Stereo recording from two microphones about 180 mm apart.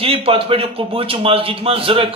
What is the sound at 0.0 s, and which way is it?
A man's voice, 30° right (ahead or behind).